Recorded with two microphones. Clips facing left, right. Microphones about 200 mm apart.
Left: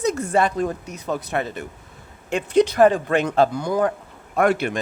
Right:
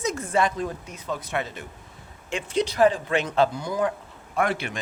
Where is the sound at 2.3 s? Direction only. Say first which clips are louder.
Left 7 dB; 55° left (ahead or behind).